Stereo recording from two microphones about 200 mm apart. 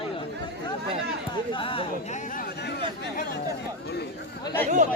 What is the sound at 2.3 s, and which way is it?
Chatter, 50° left (ahead or behind).